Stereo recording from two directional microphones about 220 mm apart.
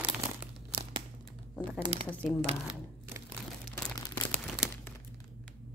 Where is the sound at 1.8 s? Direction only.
25° right (ahead or behind).